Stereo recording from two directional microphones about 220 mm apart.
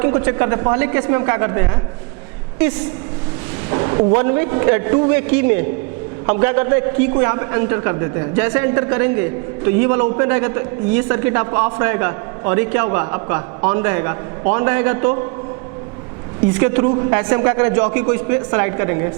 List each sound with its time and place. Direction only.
0.0 s a man's voice: 20° right (ahead or behind)
3.7 s a man's voice: 20° right (ahead or behind)
16.6 s a woman's voice: 15° right (ahead or behind)